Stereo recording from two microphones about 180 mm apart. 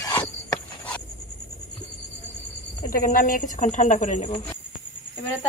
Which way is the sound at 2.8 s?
50° left (ahead or behind).